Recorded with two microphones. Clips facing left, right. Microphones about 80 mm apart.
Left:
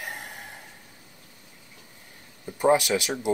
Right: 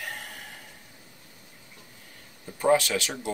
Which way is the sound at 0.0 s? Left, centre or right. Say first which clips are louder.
Left 1 dB; centre.